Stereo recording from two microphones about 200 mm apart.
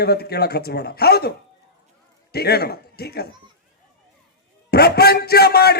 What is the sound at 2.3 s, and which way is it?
Speech, 50° left (ahead or behind).